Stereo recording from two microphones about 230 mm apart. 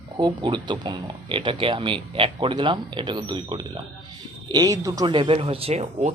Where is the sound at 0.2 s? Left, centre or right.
Centre.